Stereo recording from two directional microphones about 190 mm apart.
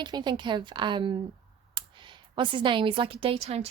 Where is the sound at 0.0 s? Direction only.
20° right (ahead or behind).